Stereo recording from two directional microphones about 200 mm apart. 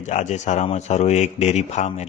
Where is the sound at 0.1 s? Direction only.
35° left (ahead or behind).